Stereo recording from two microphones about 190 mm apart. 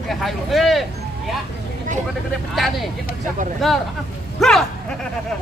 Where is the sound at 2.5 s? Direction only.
Centre (ahead or behind).